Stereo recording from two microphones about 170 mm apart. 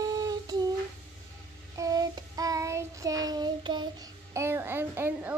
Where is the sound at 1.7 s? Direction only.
20° right (ahead or behind).